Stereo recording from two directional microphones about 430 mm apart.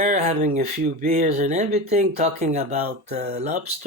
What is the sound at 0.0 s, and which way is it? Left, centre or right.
Speech, centre.